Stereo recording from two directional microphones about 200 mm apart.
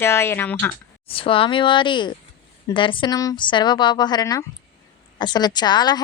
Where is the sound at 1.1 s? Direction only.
25° left (ahead or behind).